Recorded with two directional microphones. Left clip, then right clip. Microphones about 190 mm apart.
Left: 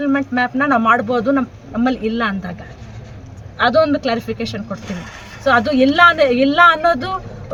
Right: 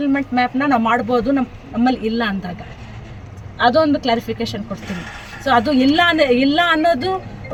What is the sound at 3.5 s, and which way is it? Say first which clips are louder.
Speech: left 1 dB; 5° left (ahead or behind).